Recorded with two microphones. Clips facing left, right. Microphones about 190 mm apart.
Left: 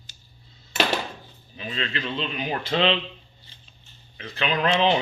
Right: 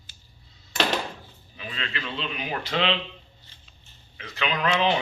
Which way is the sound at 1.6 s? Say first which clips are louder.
Left 4 dB; 25° left (ahead or behind).